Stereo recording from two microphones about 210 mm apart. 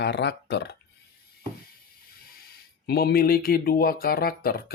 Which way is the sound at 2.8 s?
50° left (ahead or behind).